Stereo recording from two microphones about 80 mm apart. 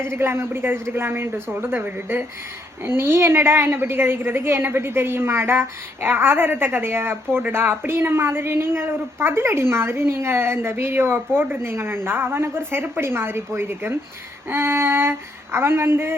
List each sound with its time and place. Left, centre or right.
0.0 s a woman's voice: right
14.5 s female singing: right